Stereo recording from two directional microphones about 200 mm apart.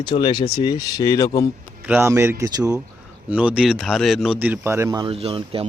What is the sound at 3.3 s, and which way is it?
Speech, 5° right (ahead or behind).